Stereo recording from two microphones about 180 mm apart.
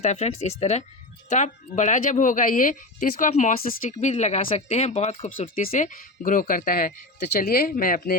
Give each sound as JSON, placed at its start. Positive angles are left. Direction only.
{"t": 0.0, "sound": "speech", "side_deg": 40}
{"t": 5.5, "sound": "speech", "side_deg": 50}